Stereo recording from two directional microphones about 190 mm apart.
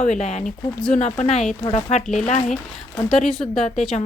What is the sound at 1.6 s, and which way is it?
Speech, 35° left (ahead or behind).